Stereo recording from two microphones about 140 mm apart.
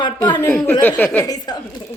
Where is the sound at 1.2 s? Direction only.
30° left (ahead or behind).